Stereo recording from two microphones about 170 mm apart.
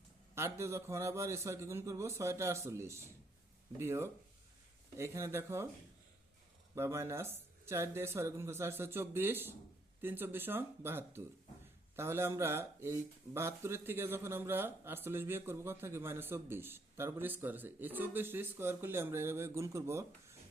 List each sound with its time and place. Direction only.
0.3 s speech: 15° right (ahead or behind)
6.7 s speech: 15° right (ahead or behind)